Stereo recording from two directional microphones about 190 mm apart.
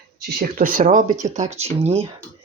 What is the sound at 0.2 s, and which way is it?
Speech, 50° right (ahead or behind).